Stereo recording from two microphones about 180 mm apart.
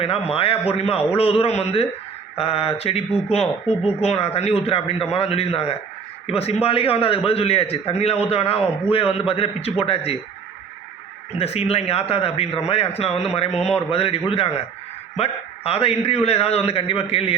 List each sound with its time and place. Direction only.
0.0 s a man's voice: 35° left (ahead or behind)
11.3 s a man's voice: 35° left (ahead or behind)